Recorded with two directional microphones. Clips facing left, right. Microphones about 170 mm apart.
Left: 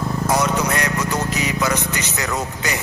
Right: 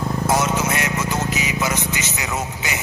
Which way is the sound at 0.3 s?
25° right (ahead or behind).